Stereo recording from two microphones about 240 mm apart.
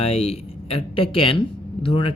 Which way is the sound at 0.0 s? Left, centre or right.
Left.